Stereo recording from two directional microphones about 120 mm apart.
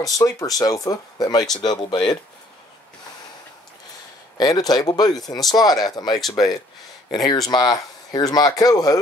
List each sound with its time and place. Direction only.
0.0 s speech: 30° left (ahead or behind)
4.4 s speech: 35° left (ahead or behind)